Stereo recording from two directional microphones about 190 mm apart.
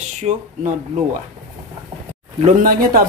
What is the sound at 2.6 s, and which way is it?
Speech, 50° right (ahead or behind).